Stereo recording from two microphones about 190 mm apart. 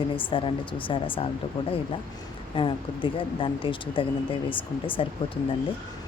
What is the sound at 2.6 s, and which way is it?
Speech, 25° left (ahead or behind).